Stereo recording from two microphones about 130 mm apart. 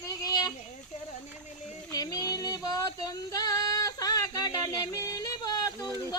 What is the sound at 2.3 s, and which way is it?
Female singing, 30° left (ahead or behind).